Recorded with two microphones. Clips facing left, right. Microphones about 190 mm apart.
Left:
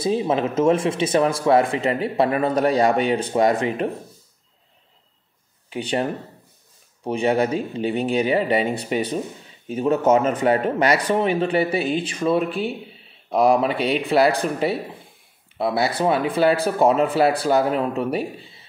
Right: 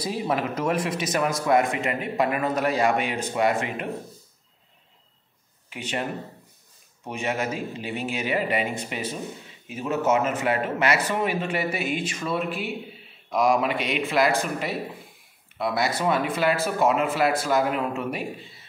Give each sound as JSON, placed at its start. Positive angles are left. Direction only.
{"t": 0.0, "sound": "speech", "side_deg": 25}
{"t": 5.7, "sound": "speech", "side_deg": 35}
{"t": 7.1, "sound": "speech", "side_deg": 35}